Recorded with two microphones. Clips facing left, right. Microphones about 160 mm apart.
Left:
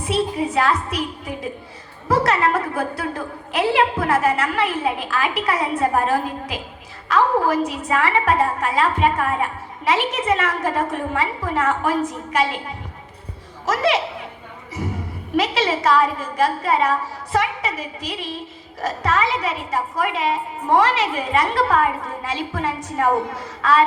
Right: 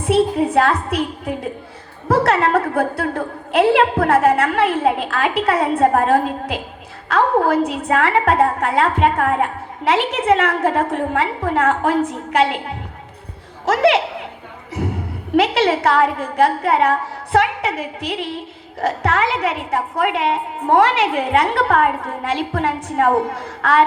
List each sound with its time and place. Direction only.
0.0 s a woman's voice: 60° right (ahead or behind)